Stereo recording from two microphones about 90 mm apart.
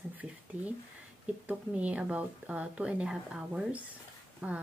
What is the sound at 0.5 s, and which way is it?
Speech, 20° right (ahead or behind).